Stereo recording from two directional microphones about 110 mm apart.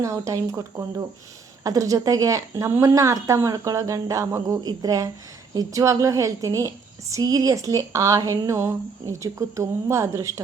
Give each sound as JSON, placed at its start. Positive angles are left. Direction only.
{"t": 0.0, "sound": "a woman's voice", "side_deg": -30}